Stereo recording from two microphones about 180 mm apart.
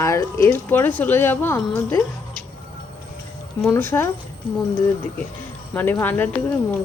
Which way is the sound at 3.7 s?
10° left (ahead or behind).